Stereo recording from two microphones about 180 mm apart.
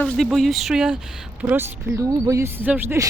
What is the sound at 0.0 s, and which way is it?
Speech, centre (ahead or behind).